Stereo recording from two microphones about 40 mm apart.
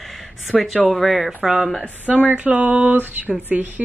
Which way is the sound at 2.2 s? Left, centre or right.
Right.